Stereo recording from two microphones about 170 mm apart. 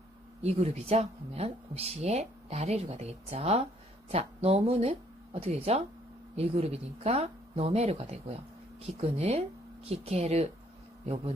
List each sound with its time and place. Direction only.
0.4 s speech: 40° right (ahead or behind)